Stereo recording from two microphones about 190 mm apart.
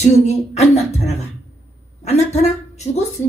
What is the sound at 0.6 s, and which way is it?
Speech, 35° left (ahead or behind).